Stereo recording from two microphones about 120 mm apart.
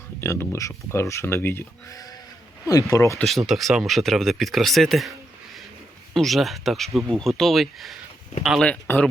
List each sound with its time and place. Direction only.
0.2 s speech: 20° left (ahead or behind)
1.9 s a sound: 30° left (ahead or behind)
2.6 s speech: 30° left (ahead or behind)
3.2 s speech: centre (ahead or behind)
6.1 s speech: centre (ahead or behind)